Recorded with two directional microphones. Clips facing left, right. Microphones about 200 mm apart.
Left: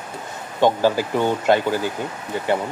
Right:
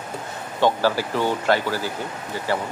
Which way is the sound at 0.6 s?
15° left (ahead or behind).